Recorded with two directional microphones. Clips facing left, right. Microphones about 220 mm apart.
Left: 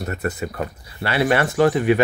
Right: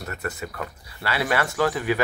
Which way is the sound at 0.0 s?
30° left (ahead or behind).